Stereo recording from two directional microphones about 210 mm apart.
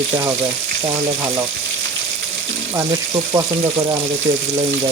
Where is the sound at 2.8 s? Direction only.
15° right (ahead or behind).